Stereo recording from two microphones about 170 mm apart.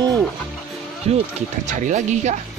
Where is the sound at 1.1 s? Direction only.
40° right (ahead or behind).